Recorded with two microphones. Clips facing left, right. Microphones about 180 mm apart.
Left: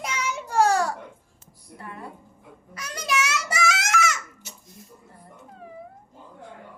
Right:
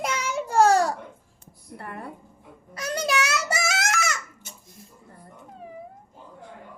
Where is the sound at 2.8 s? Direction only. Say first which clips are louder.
Right 2 dB; 35° right (ahead or behind).